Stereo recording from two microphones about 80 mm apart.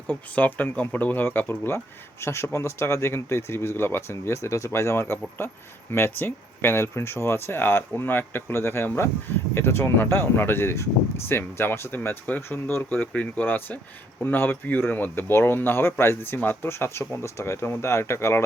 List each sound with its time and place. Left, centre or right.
0.1 s speech: left